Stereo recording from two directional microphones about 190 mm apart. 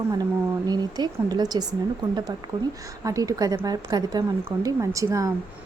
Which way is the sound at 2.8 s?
15° right (ahead or behind).